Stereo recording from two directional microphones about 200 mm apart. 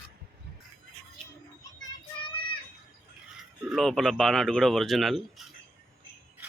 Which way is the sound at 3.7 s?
Centre (ahead or behind).